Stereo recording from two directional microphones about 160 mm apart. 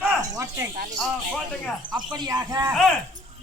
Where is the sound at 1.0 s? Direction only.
Centre (ahead or behind).